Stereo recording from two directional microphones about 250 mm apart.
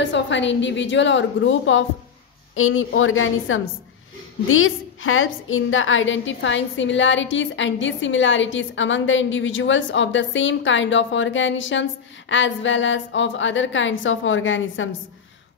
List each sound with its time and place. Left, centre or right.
0.0 s a woman's voice: left